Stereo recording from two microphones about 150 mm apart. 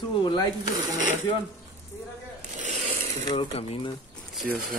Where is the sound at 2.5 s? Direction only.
55° right (ahead or behind).